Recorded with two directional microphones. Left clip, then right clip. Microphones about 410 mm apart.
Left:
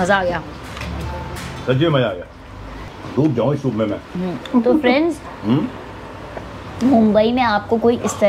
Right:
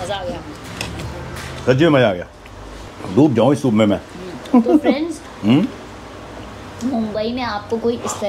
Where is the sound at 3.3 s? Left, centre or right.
Right.